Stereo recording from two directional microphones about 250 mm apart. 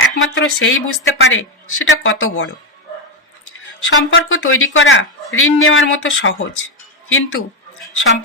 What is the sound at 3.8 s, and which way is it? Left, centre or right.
Speech, left.